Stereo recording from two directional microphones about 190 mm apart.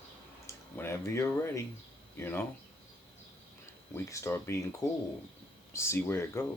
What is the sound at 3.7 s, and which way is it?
Speech, 15° left (ahead or behind).